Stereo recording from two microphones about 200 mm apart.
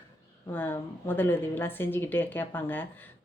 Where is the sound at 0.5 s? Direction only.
10° left (ahead or behind).